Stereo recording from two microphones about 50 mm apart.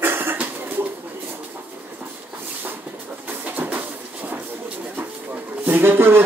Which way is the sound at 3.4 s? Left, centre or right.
Right.